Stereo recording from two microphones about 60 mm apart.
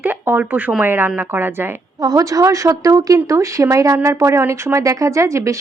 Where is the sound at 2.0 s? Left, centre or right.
Right.